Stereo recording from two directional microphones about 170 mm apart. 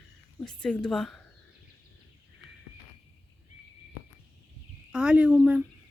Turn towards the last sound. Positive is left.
turn(degrees=-10)  # may be behind; listen again after turning